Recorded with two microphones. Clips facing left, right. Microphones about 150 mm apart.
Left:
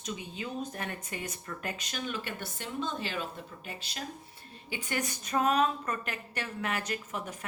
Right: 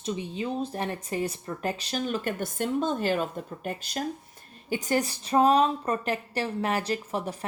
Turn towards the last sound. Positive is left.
turn(degrees=-35)  # may be behind; listen again after turning